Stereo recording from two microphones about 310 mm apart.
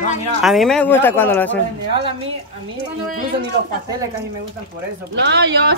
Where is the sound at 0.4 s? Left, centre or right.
Centre.